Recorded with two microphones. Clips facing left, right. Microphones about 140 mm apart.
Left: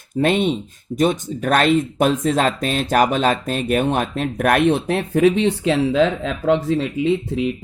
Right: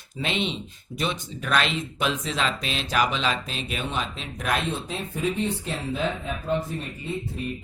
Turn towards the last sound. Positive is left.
turn(degrees=90)